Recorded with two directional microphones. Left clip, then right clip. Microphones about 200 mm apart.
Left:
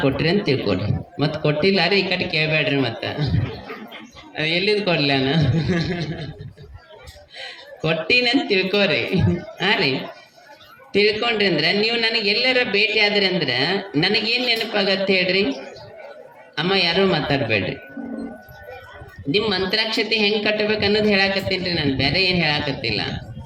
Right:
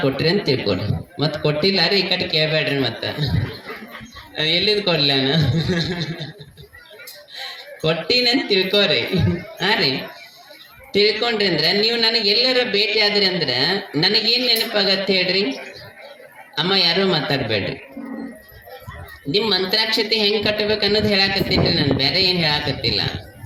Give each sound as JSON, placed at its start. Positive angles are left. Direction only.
{"t": 0.0, "sound": "speech", "side_deg": -20}
{"t": 4.4, "sound": "speech", "side_deg": -20}
{"t": 7.3, "sound": "speech", "side_deg": -20}
{"t": 10.9, "sound": "a man's voice", "side_deg": -20}
{"t": 16.6, "sound": "speech", "side_deg": -20}
{"t": 19.3, "sound": "speech", "side_deg": -20}